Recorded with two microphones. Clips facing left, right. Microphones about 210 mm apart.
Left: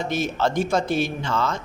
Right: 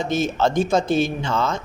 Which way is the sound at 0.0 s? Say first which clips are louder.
Right 3 dB; 20° right (ahead or behind).